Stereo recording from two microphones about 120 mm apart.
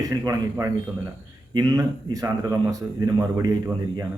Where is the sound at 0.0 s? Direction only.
30° right (ahead or behind).